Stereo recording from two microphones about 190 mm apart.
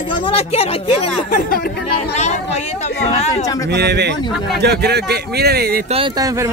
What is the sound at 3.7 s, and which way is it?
Speech, 60° right (ahead or behind).